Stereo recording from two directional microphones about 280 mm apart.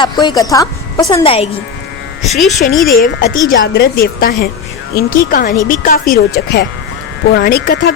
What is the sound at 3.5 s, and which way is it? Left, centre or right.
A woman's voice, left.